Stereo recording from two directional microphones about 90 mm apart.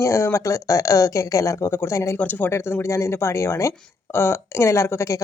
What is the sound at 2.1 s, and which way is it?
Speech, 20° left (ahead or behind).